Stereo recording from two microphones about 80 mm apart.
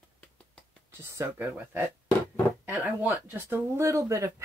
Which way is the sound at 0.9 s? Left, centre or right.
Right.